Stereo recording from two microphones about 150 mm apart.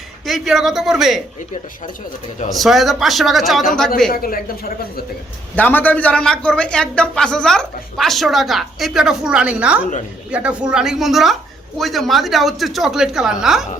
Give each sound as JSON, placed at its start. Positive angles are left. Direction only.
{"t": 0.3, "sound": "a man's voice", "side_deg": 0}
{"t": 2.5, "sound": "a man's voice", "side_deg": 0}
{"t": 4.1, "sound": "a woman's voice", "side_deg": 75}
{"t": 5.5, "sound": "a man's voice", "side_deg": 10}